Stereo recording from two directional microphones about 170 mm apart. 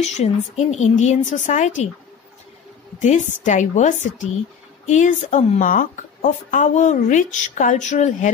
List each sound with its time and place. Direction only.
0.0 s a woman's voice: 40° left (ahead or behind)
3.0 s a woman's voice: 45° left (ahead or behind)